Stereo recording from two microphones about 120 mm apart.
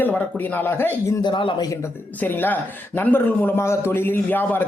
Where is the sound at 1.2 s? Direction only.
40° left (ahead or behind).